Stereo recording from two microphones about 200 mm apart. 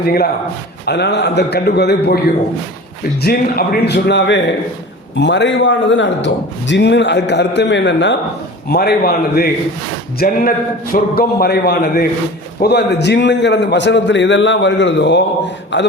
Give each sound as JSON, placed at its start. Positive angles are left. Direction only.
{"t": 0.0, "sound": "a man's voice", "side_deg": 50}
{"t": 8.7, "sound": "a man's voice", "side_deg": 50}